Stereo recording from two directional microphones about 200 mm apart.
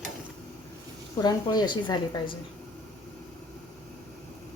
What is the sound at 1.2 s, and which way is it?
A woman's voice, 20° left (ahead or behind).